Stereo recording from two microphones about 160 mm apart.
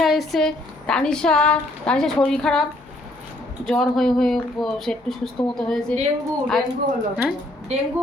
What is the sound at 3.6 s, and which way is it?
A woman's voice, centre (ahead or behind).